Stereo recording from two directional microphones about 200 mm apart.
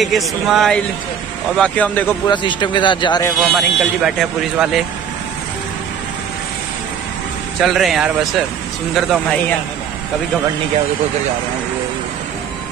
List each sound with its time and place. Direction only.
0.0 s speech: centre (ahead or behind)
2.2 s speech: 25° left (ahead or behind)
3.3 s speech: centre (ahead or behind)
7.6 s speech: centre (ahead or behind)